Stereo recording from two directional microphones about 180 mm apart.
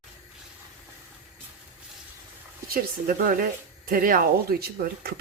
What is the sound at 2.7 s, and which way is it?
Speech, 55° right (ahead or behind).